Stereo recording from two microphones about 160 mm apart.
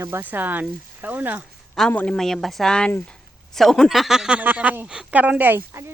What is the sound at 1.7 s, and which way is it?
Speech, 5° left (ahead or behind).